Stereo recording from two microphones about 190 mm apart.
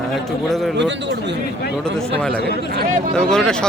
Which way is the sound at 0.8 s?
70° right (ahead or behind).